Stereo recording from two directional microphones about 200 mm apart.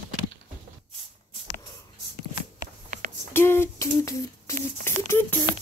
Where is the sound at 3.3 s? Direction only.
10° left (ahead or behind).